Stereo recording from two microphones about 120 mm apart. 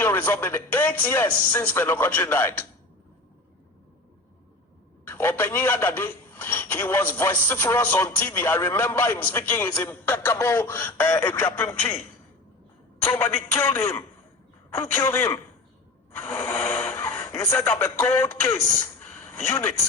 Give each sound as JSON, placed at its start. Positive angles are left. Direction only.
{"t": 0.0, "sound": "a man's voice", "side_deg": 20}
{"t": 5.0, "sound": "a man's voice", "side_deg": 20}
{"t": 13.1, "sound": "a man's voice", "side_deg": 20}
{"t": 16.2, "sound": "a sound", "side_deg": 20}
{"t": 17.7, "sound": "speech", "side_deg": 20}